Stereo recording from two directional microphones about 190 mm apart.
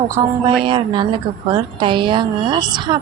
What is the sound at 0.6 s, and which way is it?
A woman's voice, 25° right (ahead or behind).